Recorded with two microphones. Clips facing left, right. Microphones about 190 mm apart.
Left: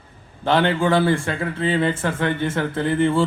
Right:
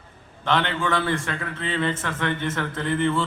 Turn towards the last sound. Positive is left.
turn(degrees=30)  # may be behind; listen again after turning